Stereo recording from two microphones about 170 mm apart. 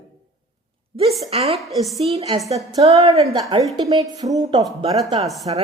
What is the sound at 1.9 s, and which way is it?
A woman's voice, 40° right (ahead or behind).